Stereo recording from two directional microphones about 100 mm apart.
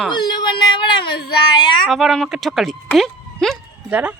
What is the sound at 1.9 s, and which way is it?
Speech, centre (ahead or behind).